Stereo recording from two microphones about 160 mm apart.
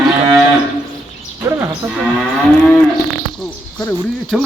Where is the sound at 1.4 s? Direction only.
20° right (ahead or behind).